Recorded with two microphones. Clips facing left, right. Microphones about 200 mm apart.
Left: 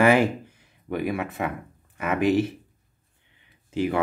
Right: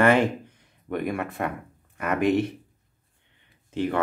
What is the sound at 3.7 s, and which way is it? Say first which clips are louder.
Speech: left 1 dB; 10° left (ahead or behind).